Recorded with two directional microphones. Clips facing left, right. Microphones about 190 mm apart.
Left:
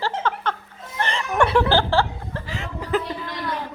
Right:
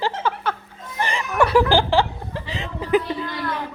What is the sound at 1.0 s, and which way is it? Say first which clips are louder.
Chuckle: right 1 dB; 10° right (ahead or behind).